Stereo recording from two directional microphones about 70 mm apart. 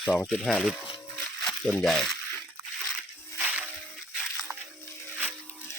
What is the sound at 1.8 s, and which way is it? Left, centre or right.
Speech, centre.